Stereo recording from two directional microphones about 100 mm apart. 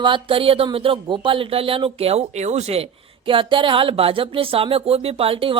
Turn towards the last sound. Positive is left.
turn(degrees=-65)  # may be behind; listen again after turning